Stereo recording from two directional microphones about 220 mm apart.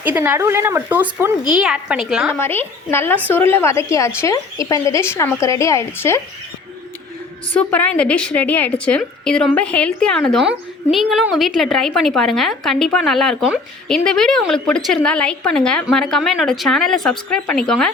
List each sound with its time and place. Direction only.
0.0 s a woman's voice: 10° right (ahead or behind)
2.4 s speech: 10° left (ahead or behind)
7.5 s a woman's voice: 5° left (ahead or behind)